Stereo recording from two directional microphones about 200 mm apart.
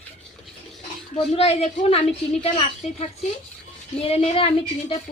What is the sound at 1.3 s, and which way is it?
Speech, 30° left (ahead or behind).